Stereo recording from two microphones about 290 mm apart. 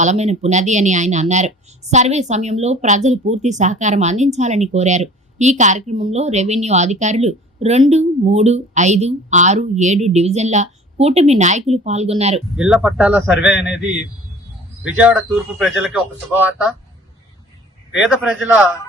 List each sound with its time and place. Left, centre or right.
0.0 s a woman's voice: right
12.5 s speech: centre
17.9 s speech: centre